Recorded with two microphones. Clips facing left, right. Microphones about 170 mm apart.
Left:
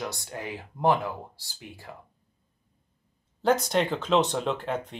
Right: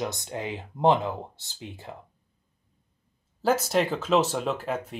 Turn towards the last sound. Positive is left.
turn(degrees=-5)  # may be behind; listen again after turning